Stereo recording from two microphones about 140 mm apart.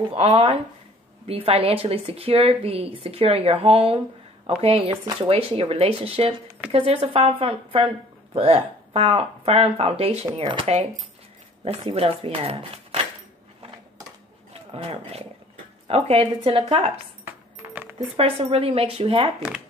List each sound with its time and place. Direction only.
0.1 s a woman's voice: 45° right (ahead or behind)
11.6 s speech: 45° right (ahead or behind)
14.5 s a woman's voice: 45° right (ahead or behind)
16.9 s cutlery: 15° right (ahead or behind)
17.9 s a woman's voice: 45° right (ahead or behind)